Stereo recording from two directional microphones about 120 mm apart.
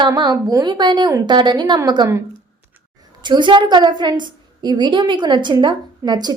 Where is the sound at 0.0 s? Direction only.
40° right (ahead or behind).